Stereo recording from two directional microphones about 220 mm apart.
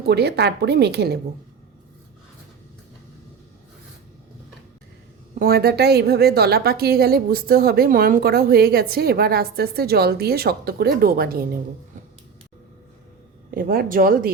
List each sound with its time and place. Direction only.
0.0 s a woman's voice: 50° right (ahead or behind)
5.3 s a woman's voice: 40° right (ahead or behind)
13.5 s speech: 40° right (ahead or behind)